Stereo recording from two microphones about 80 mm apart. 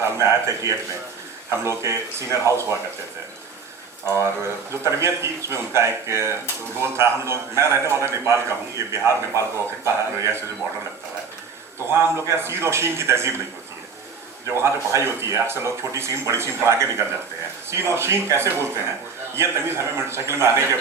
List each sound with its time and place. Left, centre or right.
0.0 s speech: right
4.0 s speech: right
11.9 s speech: right
14.4 s speech: right